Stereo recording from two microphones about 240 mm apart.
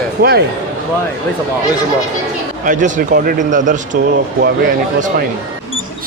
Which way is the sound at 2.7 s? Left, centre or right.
Right.